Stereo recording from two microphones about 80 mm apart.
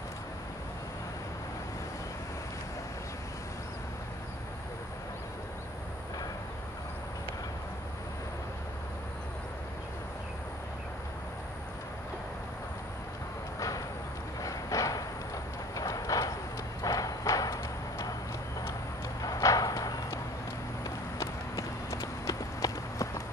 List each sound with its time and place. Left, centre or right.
13.6 s a sound: left
16.8 s horse: left
19.2 s clip-clop: left